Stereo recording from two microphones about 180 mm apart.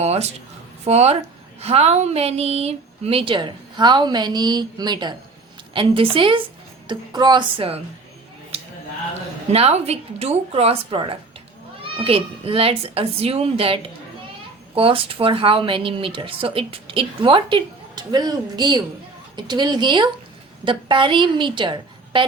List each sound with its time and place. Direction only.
0.0 s a sound: 35° right (ahead or behind)
0.9 s speech: 35° right (ahead or behind)
9.5 s speech: 35° right (ahead or behind)
14.8 s speech: 30° right (ahead or behind)